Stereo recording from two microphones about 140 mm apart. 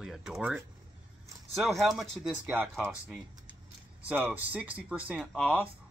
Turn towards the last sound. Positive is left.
turn(degrees=-5)  # may be behind; listen again after turning